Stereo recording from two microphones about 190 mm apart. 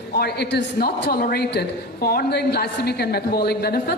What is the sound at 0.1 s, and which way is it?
A woman's voice, 55° left (ahead or behind).